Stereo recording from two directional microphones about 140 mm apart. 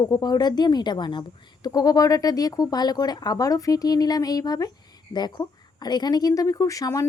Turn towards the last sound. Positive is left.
turn(degrees=25)  # may be behind; listen again after turning